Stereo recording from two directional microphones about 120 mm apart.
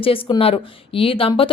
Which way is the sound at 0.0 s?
50° left (ahead or behind).